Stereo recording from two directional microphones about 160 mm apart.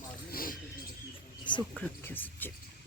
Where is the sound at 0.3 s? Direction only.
65° left (ahead or behind).